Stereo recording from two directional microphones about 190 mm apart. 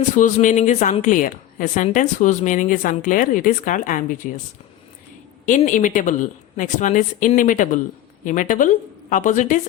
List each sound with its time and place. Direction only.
0.2 s a woman's voice: 40° left (ahead or behind)
5.5 s a woman's voice: 40° left (ahead or behind)